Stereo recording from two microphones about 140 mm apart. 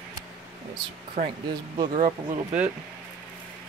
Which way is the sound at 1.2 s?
70° right (ahead or behind).